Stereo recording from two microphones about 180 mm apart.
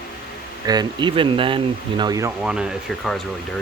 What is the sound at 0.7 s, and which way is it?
Speech, 25° right (ahead or behind).